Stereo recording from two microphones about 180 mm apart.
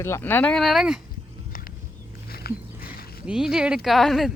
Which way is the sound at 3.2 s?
5° right (ahead or behind).